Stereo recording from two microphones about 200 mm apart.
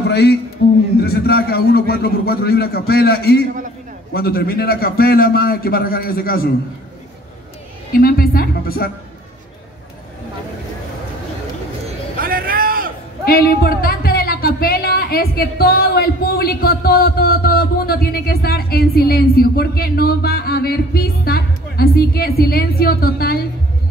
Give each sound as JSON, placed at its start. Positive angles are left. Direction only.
{"t": 0.1, "sound": "speech", "side_deg": 55}
{"t": 7.9, "sound": "a woman's voice", "side_deg": 50}
{"t": 12.2, "sound": "vehicle", "side_deg": -45}
{"t": 13.2, "sound": "speech", "side_deg": 50}